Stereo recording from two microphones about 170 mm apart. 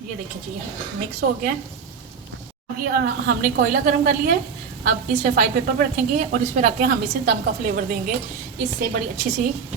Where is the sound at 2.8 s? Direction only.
60° right (ahead or behind).